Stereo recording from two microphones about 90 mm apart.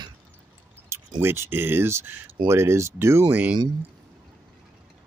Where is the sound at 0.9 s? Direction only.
30° right (ahead or behind).